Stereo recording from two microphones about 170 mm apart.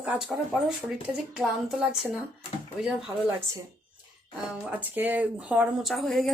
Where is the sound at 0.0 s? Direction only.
5° right (ahead or behind).